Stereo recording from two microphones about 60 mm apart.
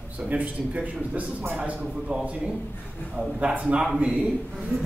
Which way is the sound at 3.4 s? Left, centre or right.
Right.